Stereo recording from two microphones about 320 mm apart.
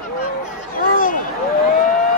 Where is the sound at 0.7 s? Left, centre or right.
Left.